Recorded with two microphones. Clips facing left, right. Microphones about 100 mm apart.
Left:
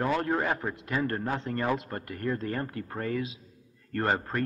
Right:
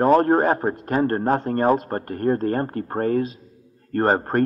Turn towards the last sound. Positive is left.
turn(degrees=-45)  # may be behind; listen again after turning